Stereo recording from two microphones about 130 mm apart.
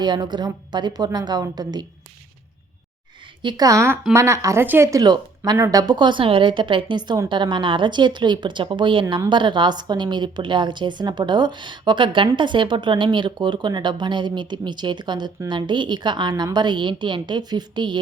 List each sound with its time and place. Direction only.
0.0 s a woman's voice: 35° right (ahead or behind)
3.4 s speech: 25° right (ahead or behind)
4.9 s speech: 30° right (ahead or behind)
5.8 s a woman's voice: 35° right (ahead or behind)